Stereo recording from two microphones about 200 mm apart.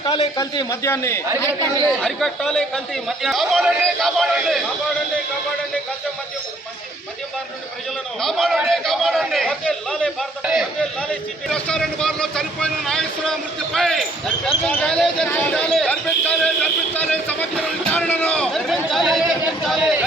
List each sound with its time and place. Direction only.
0.0 s a man's voice: 25° left (ahead or behind)
1.9 s speech: centre (ahead or behind)
8.2 s speech: centre (ahead or behind)